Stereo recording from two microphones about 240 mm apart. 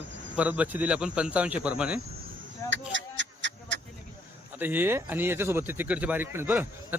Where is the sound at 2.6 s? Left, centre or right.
Right.